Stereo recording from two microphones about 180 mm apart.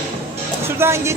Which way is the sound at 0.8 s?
15° right (ahead or behind).